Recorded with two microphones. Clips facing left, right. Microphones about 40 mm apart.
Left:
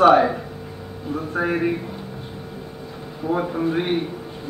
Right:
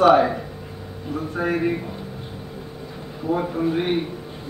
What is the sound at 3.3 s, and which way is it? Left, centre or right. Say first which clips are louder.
Speech: even; centre.